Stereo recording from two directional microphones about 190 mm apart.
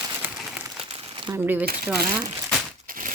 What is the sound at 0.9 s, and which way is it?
Crumpling, 25° right (ahead or behind).